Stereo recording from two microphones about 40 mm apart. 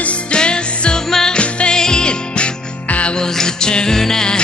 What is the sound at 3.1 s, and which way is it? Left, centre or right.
Music, centre.